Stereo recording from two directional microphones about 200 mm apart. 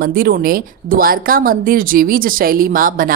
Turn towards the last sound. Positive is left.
turn(degrees=-45)  # may be behind; listen again after turning